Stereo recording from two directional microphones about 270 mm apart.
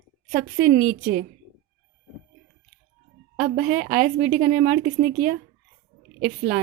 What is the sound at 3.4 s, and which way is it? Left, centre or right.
A woman's voice, right.